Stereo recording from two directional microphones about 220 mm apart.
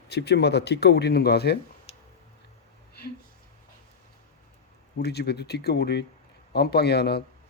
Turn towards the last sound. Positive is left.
turn(degrees=50)  # may be behind; listen again after turning